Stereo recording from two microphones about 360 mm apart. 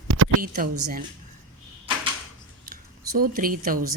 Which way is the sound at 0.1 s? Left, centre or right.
Right.